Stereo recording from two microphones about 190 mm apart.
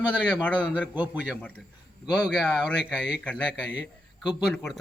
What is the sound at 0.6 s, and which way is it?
Speech, 5° right (ahead or behind).